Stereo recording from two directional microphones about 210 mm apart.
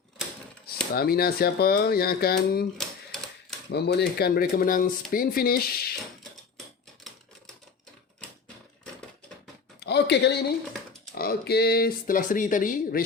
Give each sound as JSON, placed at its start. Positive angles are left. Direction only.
{"t": 0.9, "sound": "speech", "side_deg": 45}
{"t": 3.7, "sound": "speech", "side_deg": 55}
{"t": 9.8, "sound": "a sound", "side_deg": 50}
{"t": 11.1, "sound": "speech", "side_deg": 45}